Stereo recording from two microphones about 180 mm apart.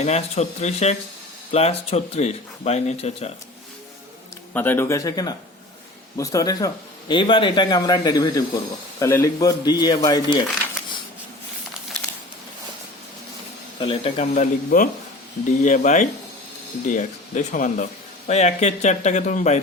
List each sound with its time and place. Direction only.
0.0 s speech: 35° left (ahead or behind)
4.5 s a man's voice: 10° left (ahead or behind)
13.7 s speech: 30° left (ahead or behind)
14.3 s speech: 45° left (ahead or behind)